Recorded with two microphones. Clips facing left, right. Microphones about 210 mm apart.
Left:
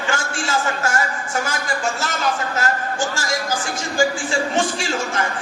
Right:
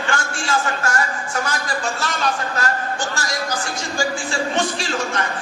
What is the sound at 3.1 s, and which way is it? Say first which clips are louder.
Speech: left 2 dB; 25° left (ahead or behind).